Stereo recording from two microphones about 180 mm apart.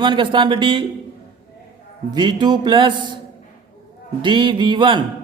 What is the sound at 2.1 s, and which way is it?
Speech, 25° right (ahead or behind).